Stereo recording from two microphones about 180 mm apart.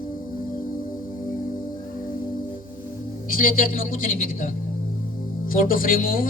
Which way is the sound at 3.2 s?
50° left (ahead or behind).